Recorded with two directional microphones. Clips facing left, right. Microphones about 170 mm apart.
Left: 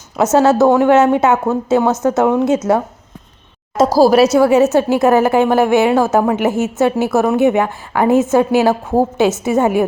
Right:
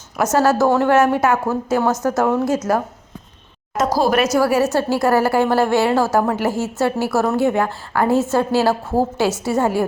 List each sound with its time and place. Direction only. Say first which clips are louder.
0.3 s a woman's voice: left 5 dB; 20° left (ahead or behind)
4.2 s a woman's voice: left 6 dB; 25° left (ahead or behind)